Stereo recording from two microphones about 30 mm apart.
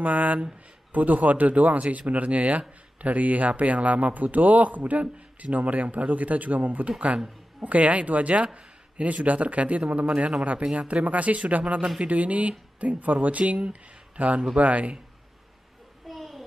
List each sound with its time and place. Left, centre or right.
0.0 s speech: right
7.1 s speech: right
16.1 s a sound: centre